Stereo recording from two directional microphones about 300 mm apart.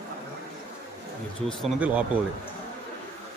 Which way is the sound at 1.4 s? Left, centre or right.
Centre.